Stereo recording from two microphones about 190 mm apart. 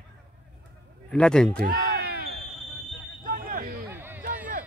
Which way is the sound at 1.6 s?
55° right (ahead or behind).